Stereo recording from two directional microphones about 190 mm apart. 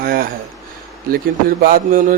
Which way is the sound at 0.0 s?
50° right (ahead or behind).